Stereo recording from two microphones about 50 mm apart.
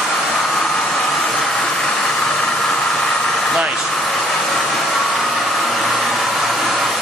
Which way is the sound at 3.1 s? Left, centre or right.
Centre.